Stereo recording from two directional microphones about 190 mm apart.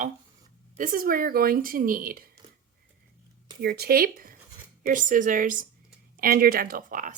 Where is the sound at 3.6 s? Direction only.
55° right (ahead or behind).